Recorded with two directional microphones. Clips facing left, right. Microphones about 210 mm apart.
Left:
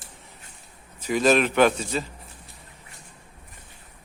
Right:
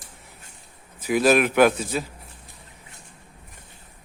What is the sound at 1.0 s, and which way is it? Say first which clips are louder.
A man's voice: right 1 dB; 10° right (ahead or behind).